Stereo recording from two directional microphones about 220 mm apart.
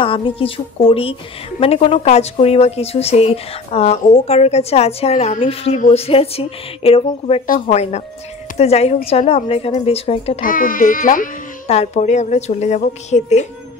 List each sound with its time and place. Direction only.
0.0 s a woman's voice: 25° left (ahead or behind)
10.4 s speech: 40° left (ahead or behind)